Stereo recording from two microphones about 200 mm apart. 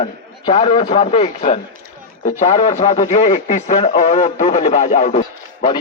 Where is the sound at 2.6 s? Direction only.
20° left (ahead or behind).